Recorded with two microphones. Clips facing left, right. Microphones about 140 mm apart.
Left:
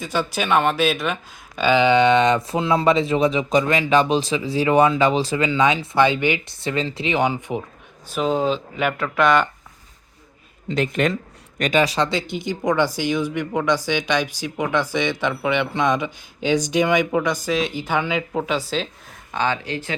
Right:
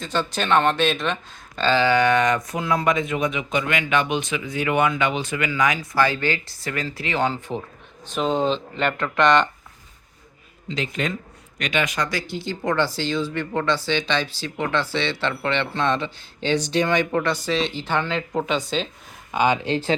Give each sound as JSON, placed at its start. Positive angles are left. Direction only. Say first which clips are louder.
{"t": 0.0, "sound": "speech", "louder": "left 1 dB", "side_deg": 10}
{"t": 8.0, "sound": "speech", "louder": "left 1 dB", "side_deg": 5}
{"t": 10.7, "sound": "a man's voice", "louder": "left 6 dB", "side_deg": 55}
{"t": 11.5, "sound": "speech", "louder": "left 5 dB", "side_deg": 40}
{"t": 19.3, "sound": "speech", "louder": "right 3 dB", "side_deg": -10}
{"t": 19.6, "sound": "speech", "louder": "right 5 dB", "side_deg": -30}